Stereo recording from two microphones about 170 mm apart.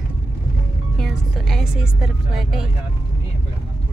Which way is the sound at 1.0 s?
Centre (ahead or behind).